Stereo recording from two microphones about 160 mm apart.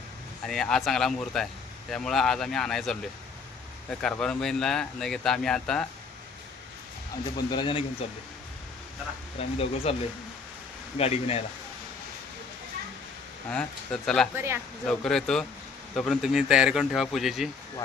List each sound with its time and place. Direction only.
0.4 s speech: centre (ahead or behind)
7.3 s speech: 30° left (ahead or behind)
9.4 s speech: 40° left (ahead or behind)
10.9 s speech: 40° left (ahead or behind)
13.5 s speech: 5° left (ahead or behind)
14.3 s speech: 15° right (ahead or behind)
14.8 s speech: 5° left (ahead or behind)